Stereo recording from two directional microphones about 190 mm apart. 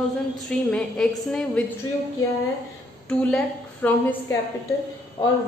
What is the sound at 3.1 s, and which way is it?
Speech, 5° left (ahead or behind).